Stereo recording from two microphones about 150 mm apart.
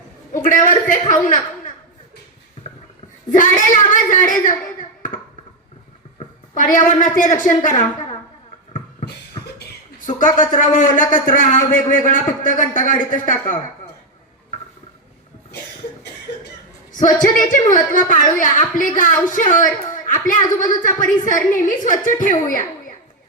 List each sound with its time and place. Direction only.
0.4 s a man's voice: 60° left (ahead or behind)
3.3 s speech: 60° left (ahead or behind)
6.5 s a woman's voice: 60° left (ahead or behind)
10.3 s a man's voice: 60° left (ahead or behind)
17.2 s a man's voice: 60° left (ahead or behind)
19.9 s a sound: 60° left (ahead or behind)
20.8 s a man's voice: 60° left (ahead or behind)